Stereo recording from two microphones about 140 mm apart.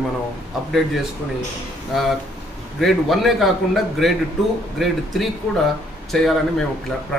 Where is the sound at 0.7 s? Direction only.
Centre (ahead or behind).